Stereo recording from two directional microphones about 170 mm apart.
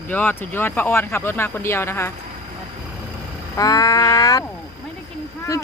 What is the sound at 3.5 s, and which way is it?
Music, 20° left (ahead or behind).